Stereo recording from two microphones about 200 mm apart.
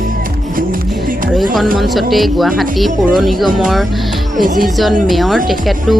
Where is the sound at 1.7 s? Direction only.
Centre (ahead or behind).